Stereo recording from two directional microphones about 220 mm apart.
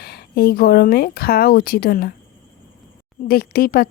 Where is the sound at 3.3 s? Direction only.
45° left (ahead or behind).